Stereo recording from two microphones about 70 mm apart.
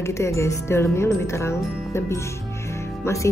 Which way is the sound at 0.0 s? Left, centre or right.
Left.